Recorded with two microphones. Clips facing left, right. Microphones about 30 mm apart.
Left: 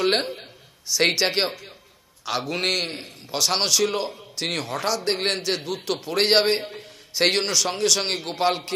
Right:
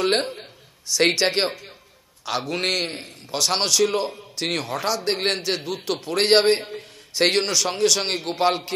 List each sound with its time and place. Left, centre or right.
0.0 s a man's voice: centre